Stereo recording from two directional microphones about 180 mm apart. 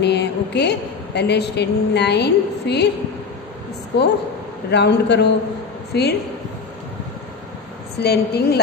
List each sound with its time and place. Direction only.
0.0 s a woman's voice: 70° left (ahead or behind)
3.9 s a woman's voice: 70° left (ahead or behind)
8.0 s a woman's voice: 60° left (ahead or behind)